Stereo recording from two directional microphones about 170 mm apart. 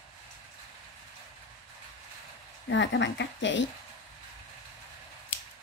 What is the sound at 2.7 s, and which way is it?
Speech, 90° left.